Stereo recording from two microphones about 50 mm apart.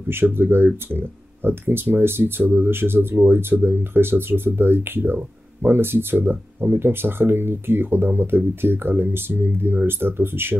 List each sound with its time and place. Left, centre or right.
0.1 s speech: right